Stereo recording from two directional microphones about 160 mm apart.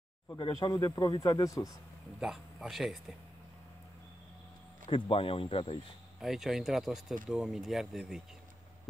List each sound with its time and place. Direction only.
0.4 s speech: 25° left (ahead or behind)
2.1 s speech: 5° right (ahead or behind)
4.8 s speech: 35° left (ahead or behind)
6.1 s speech: centre (ahead or behind)